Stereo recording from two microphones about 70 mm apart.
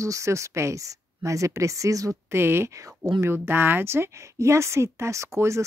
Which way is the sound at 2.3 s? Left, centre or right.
Right.